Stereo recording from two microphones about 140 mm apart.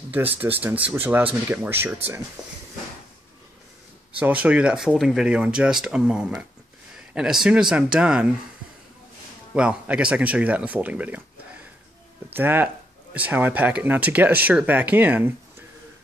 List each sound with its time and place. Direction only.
0.1 s a man's voice: 10° right (ahead or behind)
4.2 s a man's voice: 10° right (ahead or behind)
9.5 s speech: 5° right (ahead or behind)
12.4 s speech: 15° right (ahead or behind)